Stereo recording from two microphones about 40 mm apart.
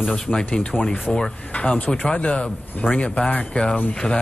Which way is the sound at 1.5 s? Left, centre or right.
Left.